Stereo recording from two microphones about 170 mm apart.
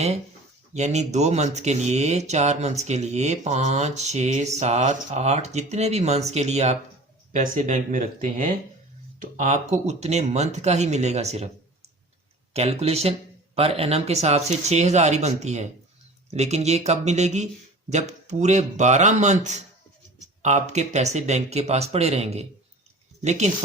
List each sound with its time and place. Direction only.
0.7 s speech: 40° right (ahead or behind)
12.5 s speech: 40° right (ahead or behind)